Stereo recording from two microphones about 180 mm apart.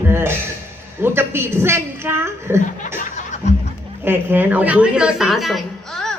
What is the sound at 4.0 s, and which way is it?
A woman's voice, 10° right (ahead or behind).